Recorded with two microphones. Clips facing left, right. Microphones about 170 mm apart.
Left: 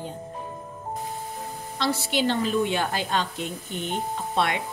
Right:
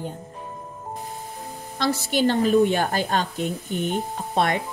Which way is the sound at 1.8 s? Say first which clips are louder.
Right 3 dB; 45° right (ahead or behind).